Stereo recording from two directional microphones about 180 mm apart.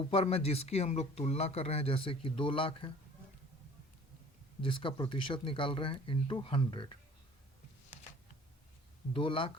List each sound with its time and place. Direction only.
0.0 s speech: 30° left (ahead or behind)
4.6 s speech: 30° left (ahead or behind)
9.1 s speech: 30° left (ahead or behind)